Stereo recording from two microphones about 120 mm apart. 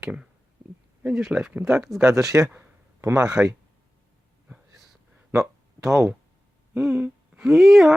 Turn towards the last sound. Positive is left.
turn(degrees=0)  # may be behind; listen again after turning